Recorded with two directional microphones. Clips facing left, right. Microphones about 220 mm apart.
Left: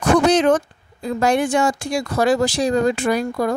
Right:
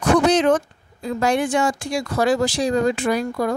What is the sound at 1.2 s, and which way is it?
Speech, 45° left (ahead or behind).